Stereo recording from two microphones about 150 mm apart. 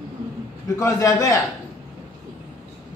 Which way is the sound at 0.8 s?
20° left (ahead or behind).